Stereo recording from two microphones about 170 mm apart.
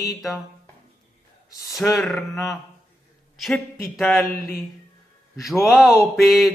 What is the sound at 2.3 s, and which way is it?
Speech, 20° left (ahead or behind).